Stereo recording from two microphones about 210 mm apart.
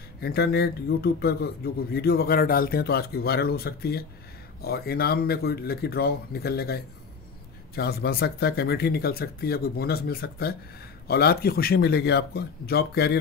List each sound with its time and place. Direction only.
0.2 s speech: 45° left (ahead or behind)